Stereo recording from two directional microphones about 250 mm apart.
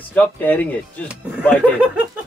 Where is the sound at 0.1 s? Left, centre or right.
Centre.